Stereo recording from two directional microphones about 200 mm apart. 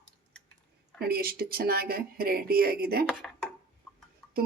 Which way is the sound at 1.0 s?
50° right (ahead or behind).